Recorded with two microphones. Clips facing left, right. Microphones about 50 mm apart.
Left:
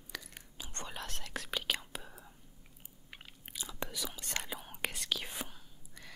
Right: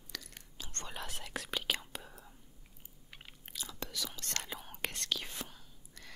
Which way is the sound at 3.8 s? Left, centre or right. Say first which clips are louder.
Left 2 dB; centre.